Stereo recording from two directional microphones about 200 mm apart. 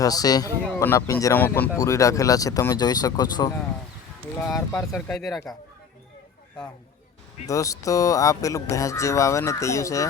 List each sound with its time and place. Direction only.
0.0 s a man's voice: 20° left (ahead or behind)
4.5 s speech: 15° left (ahead or behind)
4.9 s speech: 5° left (ahead or behind)
7.4 s speech: 15° left (ahead or behind)